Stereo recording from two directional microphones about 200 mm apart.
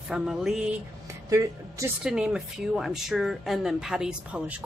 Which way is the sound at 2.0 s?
5° right (ahead or behind).